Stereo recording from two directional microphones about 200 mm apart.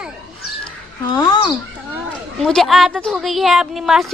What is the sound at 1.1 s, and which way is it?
Speech, 20° left (ahead or behind).